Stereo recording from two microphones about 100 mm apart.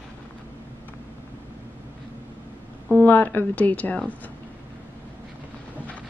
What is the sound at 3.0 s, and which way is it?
A woman's voice, 20° left (ahead or behind).